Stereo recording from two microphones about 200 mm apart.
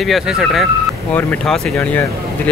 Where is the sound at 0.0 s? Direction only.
Centre (ahead or behind).